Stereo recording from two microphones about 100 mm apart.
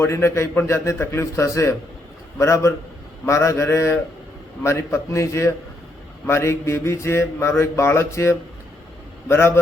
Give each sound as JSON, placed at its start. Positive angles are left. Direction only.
{"t": 0.0, "sound": "a man's voice", "side_deg": 25}